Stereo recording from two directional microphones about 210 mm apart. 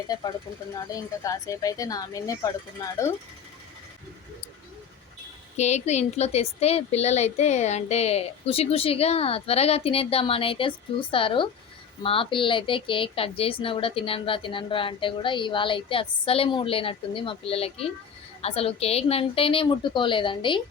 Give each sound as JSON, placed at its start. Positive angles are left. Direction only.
{"t": 0.1, "sound": "a woman's voice", "side_deg": 20}
{"t": 5.5, "sound": "a woman's voice", "side_deg": 35}